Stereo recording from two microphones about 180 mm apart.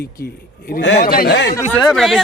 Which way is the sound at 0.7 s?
80° left.